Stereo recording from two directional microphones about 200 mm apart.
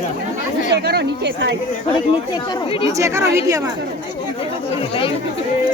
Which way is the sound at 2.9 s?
15° right (ahead or behind).